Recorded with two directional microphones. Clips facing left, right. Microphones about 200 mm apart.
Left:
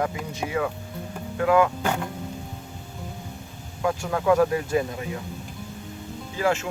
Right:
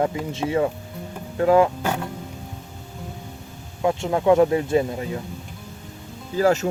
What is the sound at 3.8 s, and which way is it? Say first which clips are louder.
Speech: right 4 dB; 25° right (ahead or behind).